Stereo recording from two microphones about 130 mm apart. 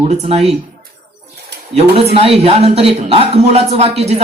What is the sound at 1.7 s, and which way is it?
Speech, 50° right (ahead or behind).